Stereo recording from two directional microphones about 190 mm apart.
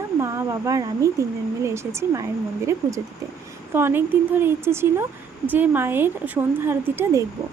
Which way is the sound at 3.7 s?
10° right (ahead or behind).